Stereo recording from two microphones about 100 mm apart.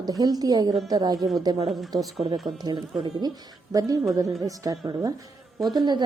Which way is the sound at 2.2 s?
65° right (ahead or behind).